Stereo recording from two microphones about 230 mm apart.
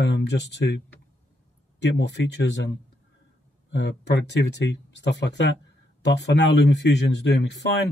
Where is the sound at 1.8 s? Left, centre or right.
Left.